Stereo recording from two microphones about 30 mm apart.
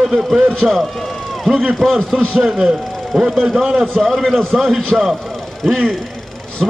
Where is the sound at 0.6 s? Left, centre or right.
Right.